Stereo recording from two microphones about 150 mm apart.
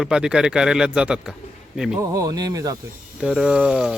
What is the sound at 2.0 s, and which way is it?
Speech, 25° right (ahead or behind).